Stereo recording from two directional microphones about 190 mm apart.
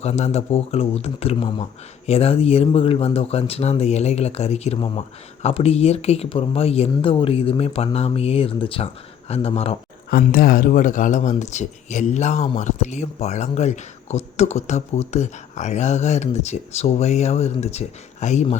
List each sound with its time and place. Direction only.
0.0 s speech: 35° left (ahead or behind)
10.1 s speech: 50° left (ahead or behind)